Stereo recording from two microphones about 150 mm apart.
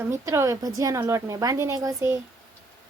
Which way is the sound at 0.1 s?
20° right (ahead or behind).